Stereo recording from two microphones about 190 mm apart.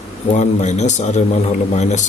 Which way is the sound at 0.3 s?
35° left (ahead or behind).